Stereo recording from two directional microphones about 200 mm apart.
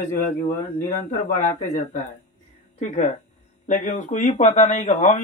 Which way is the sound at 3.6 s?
40° left (ahead or behind).